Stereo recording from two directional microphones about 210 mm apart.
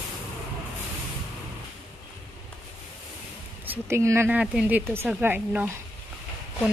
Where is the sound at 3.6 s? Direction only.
10° right (ahead or behind).